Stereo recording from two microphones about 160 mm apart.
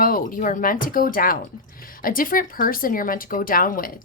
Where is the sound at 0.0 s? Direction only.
60° left (ahead or behind).